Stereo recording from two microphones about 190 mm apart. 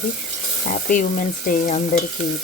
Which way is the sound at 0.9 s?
45° left (ahead or behind).